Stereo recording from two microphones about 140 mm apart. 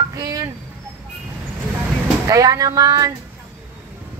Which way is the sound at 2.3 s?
25° right (ahead or behind).